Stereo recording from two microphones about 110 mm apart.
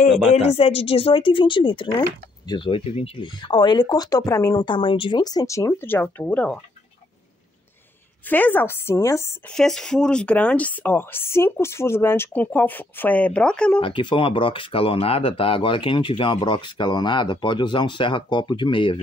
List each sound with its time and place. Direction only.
0.3 s speech: 70° left (ahead or behind); by 5.2 s 50° left (ahead or behind)
5.2 s speech: 35° left (ahead or behind); by 6.6 s 10° left (ahead or behind)
8.3 s speech: 15° left (ahead or behind)
9.5 s speech: 5° left (ahead or behind)
13.7 s speech: 50° left (ahead or behind)